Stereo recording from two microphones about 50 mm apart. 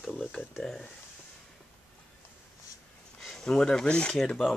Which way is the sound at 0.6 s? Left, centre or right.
Centre.